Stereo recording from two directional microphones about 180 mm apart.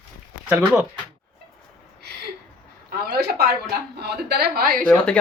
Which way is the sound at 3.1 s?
60° right (ahead or behind).